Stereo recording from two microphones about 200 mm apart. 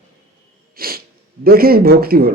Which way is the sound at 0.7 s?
50° right (ahead or behind).